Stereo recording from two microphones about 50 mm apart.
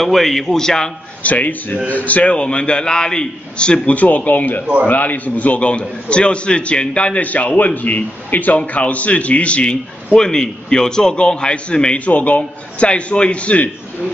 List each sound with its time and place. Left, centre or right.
0.0 s a man's voice: centre
1.2 s a man's voice: left